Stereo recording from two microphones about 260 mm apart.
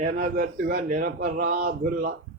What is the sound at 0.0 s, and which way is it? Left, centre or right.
Speech, right.